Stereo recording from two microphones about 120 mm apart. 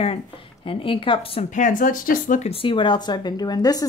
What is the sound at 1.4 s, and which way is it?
Speech, 90° left.